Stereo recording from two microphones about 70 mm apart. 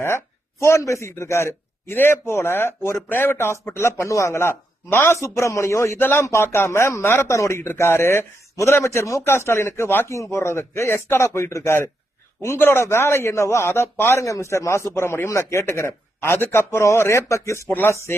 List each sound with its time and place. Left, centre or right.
0.6 s a man's voice: left
4.9 s a woman's voice: left
5.1 s speech: left
6.0 s a woman's voice: left
6.2 s a man's voice: left
10.1 s a man's voice: left